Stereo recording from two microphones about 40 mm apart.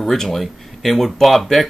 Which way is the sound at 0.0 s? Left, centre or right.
Centre.